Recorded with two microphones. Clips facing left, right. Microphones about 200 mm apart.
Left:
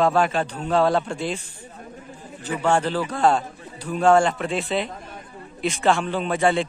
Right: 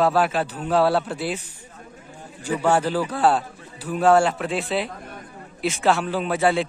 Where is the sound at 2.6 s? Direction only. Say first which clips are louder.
Even; 10° right (ahead or behind).